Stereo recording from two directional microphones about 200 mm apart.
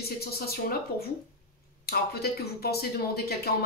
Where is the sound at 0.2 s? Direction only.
50° left (ahead or behind).